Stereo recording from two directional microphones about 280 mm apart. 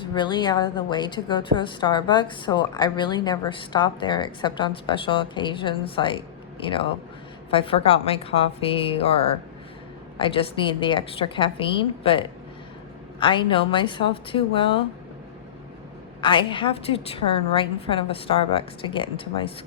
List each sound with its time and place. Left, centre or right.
0.0 s a woman's voice: centre
7.5 s a woman's voice: centre
10.2 s a woman's voice: centre
16.2 s a woman's voice: centre